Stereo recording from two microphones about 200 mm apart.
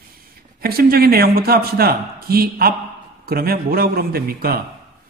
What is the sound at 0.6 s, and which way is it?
A man's voice, 50° right (ahead or behind).